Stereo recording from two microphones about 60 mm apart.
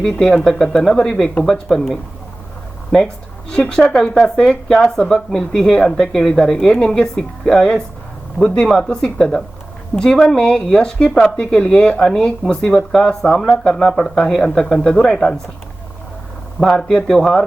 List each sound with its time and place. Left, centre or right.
0.0 s speech: centre
3.5 s speech: centre
16.6 s speech: centre